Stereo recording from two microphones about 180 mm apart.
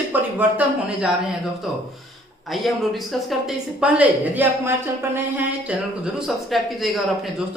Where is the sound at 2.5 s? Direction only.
Centre (ahead or behind).